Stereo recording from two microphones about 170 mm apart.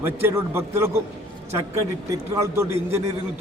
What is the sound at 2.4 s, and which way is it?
Speech, 15° right (ahead or behind).